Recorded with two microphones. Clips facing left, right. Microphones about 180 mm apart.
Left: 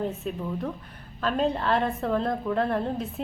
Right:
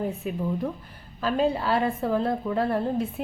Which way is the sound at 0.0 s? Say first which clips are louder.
Right 2 dB; 10° right (ahead or behind).